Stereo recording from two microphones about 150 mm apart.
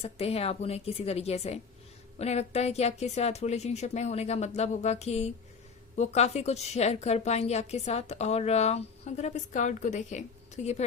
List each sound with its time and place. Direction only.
0.0 s a woman's voice: 40° left (ahead or behind)